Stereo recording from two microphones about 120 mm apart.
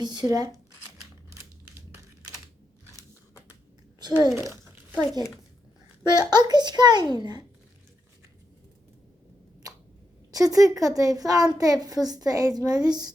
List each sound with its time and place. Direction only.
0.0 s a child's voice: 35° right (ahead or behind)
4.4 s a sound: 20° right (ahead or behind)
6.1 s a child's voice: 35° right (ahead or behind)
10.3 s a child's voice: 30° right (ahead or behind)